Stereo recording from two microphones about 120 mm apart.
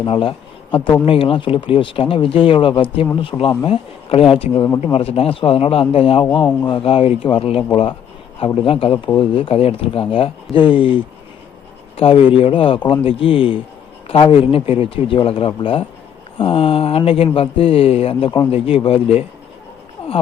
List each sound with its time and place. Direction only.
0.0 s speech: 50° left (ahead or behind)